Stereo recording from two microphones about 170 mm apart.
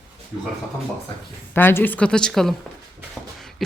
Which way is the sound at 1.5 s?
10° left (ahead or behind).